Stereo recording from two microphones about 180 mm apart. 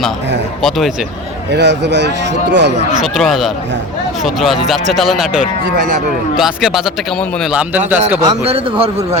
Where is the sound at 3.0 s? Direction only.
Centre (ahead or behind).